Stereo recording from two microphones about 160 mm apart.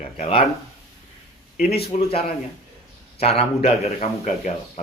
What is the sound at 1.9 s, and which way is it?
Speech, 50° left (ahead or behind).